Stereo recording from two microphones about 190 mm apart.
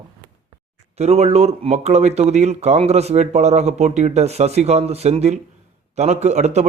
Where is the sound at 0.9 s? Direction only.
35° right (ahead or behind).